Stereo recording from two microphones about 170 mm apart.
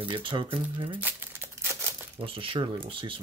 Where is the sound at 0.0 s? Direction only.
30° right (ahead or behind).